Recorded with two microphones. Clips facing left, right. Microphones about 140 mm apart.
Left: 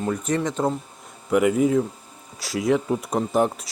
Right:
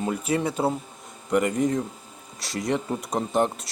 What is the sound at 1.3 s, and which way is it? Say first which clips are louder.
Speech: left 4 dB; 5° left (ahead or behind).